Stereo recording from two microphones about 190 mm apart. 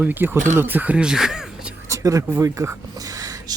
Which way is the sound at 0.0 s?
10° right (ahead or behind).